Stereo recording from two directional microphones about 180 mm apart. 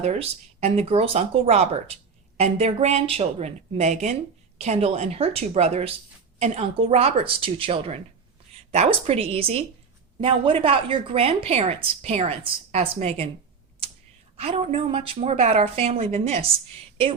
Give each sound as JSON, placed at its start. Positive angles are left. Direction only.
{"t": 0.0, "sound": "speech", "side_deg": -40}
{"t": 14.3, "sound": "speech", "side_deg": -35}